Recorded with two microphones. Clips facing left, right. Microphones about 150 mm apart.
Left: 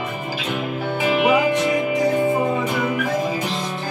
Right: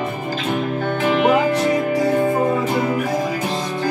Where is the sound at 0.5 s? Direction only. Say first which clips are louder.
Right 2 dB; 10° left (ahead or behind).